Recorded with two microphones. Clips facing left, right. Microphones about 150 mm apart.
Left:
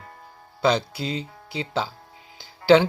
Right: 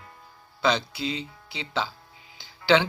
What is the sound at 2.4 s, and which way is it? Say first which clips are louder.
Music: left 5 dB; 50° left (ahead or behind).